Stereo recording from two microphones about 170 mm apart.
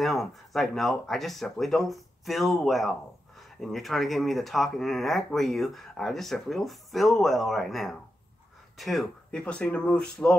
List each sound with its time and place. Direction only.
0.0 s speech: centre (ahead or behind)